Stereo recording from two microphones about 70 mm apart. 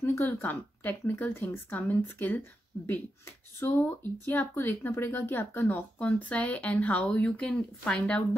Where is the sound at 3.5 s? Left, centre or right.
Left.